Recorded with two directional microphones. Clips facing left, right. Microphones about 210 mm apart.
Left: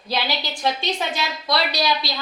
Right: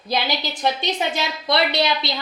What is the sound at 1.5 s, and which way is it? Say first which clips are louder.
Speech: right 2 dB; 25° right (ahead or behind).